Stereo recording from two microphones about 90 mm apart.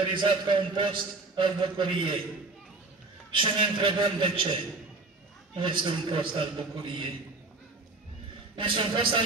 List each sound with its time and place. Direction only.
0.1 s a man's voice: 65° right (ahead or behind)
3.3 s a man's voice: 70° right (ahead or behind)
5.6 s a man's voice: 65° right (ahead or behind)
8.5 s a man's voice: 70° right (ahead or behind)